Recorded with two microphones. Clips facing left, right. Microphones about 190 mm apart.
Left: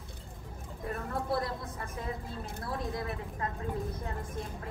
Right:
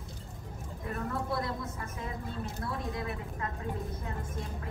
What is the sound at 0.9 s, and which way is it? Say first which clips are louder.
Speech: left 1 dB; 35° left (ahead or behind).